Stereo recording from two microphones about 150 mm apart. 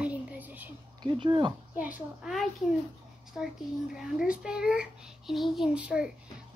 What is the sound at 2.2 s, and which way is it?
Speech, centre (ahead or behind).